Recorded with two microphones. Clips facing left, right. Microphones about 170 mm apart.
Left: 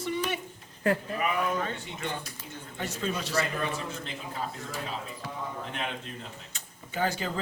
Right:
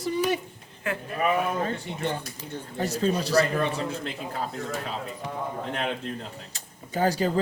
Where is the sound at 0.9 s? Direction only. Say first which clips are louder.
Left 5 dB; 35° left (ahead or behind).